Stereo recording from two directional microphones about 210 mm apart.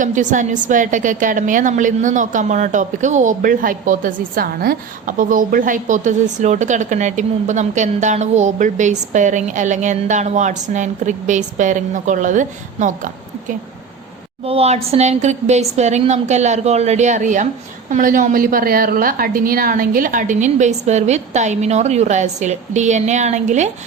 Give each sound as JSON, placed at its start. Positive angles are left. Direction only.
{"t": 0.0, "sound": "a woman's voice", "side_deg": -35}
{"t": 14.4, "sound": "a woman's voice", "side_deg": -30}